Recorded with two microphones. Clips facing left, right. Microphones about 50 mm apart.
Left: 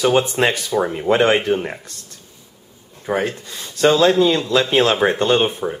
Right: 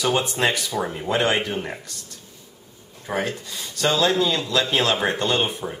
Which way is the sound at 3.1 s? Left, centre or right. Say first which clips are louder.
Left 5 dB; centre.